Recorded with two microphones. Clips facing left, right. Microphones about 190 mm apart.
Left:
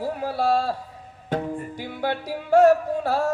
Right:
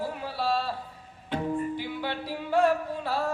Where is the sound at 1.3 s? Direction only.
45° left (ahead or behind).